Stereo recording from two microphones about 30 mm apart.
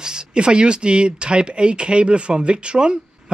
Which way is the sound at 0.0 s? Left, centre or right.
Right.